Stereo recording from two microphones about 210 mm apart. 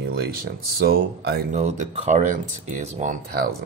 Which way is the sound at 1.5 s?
30° right (ahead or behind).